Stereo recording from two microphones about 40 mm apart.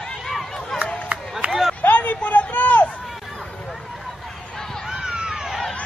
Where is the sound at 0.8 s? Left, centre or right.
Right.